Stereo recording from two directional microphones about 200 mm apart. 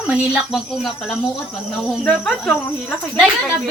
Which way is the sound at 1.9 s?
5° left (ahead or behind).